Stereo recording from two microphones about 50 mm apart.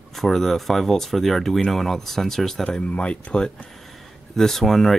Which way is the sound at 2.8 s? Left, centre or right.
Left.